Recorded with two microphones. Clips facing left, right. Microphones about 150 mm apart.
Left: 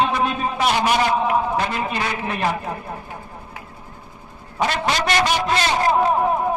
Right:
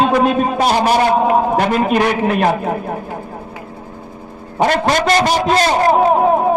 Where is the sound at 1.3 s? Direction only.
75° right (ahead or behind).